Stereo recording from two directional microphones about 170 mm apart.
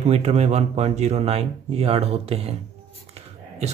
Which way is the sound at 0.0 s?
40° right (ahead or behind).